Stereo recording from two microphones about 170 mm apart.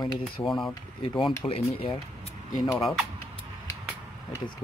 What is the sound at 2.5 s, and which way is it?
Speech, 25° left (ahead or behind).